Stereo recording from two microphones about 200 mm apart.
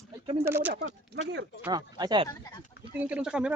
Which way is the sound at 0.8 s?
60° right (ahead or behind).